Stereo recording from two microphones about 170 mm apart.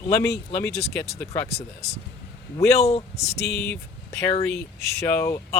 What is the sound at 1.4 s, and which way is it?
Speech, 40° left (ahead or behind).